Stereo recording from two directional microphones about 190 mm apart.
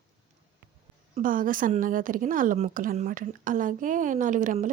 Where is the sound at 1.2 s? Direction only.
45° right (ahead or behind).